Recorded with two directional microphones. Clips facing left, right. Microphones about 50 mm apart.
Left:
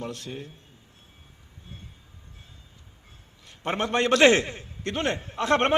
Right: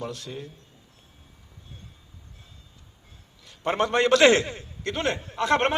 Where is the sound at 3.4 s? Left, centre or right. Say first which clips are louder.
Right 3 dB; left.